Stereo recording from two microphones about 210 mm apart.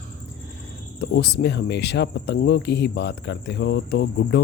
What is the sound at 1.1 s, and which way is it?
Speech, 55° left (ahead or behind).